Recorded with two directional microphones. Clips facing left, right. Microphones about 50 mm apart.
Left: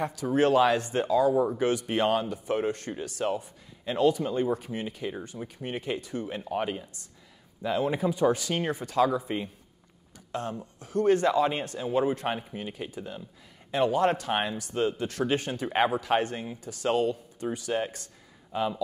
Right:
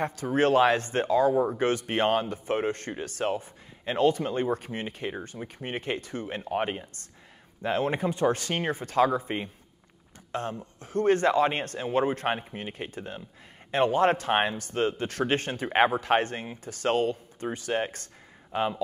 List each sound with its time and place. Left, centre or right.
0.0 s speech: right